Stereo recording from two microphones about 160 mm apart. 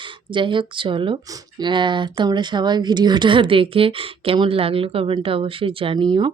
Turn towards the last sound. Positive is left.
turn(degrees=-35)  # may be behind; listen again after turning